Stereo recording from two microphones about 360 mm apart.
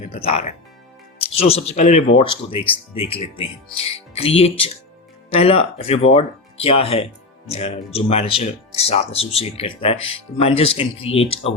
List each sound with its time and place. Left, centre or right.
0.0 s speech: centre